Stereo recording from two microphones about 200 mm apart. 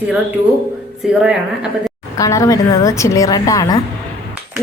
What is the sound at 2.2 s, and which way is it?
A woman's voice, 15° left (ahead or behind).